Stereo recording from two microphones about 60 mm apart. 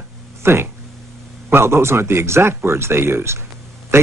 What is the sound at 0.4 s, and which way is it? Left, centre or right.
Speech, right.